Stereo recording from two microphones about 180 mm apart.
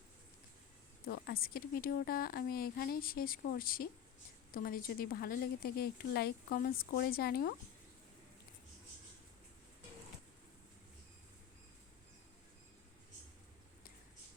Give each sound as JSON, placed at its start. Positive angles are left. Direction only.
{"t": 1.0, "sound": "speech", "side_deg": 55}